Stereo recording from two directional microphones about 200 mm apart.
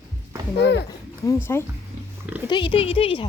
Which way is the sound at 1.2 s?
10° left (ahead or behind).